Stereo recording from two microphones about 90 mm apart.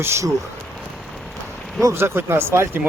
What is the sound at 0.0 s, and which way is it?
Speech, 30° right (ahead or behind).